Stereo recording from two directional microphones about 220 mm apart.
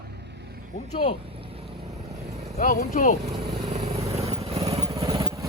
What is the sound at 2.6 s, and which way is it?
Speech, 35° left (ahead or behind).